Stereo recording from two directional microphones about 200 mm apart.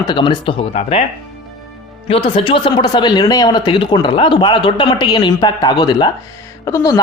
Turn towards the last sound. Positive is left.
turn(degrees=15)  # may be behind; listen again after turning